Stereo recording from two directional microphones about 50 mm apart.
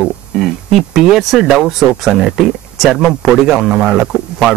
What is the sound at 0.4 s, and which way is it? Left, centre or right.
Speech, centre.